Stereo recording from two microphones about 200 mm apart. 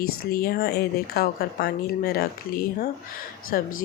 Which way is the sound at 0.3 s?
50° left (ahead or behind).